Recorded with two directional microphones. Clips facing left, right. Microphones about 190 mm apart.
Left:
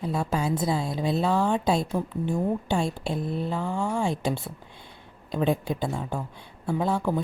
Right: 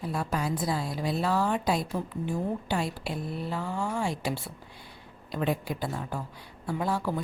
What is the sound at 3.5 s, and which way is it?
A woman's voice, 20° left (ahead or behind).